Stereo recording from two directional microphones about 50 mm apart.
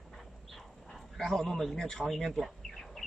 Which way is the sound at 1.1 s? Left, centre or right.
Centre.